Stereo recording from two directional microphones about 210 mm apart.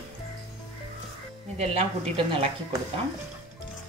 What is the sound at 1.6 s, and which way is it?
Speech, 30° right (ahead or behind).